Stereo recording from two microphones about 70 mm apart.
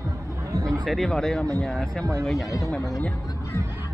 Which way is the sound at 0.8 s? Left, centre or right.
Centre.